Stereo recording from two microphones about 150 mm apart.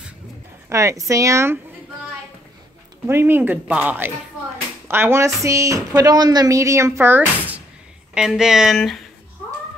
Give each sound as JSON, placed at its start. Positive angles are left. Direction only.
{"t": 0.7, "sound": "a woman's voice", "side_deg": -20}
{"t": 3.1, "sound": "a woman's voice", "side_deg": -15}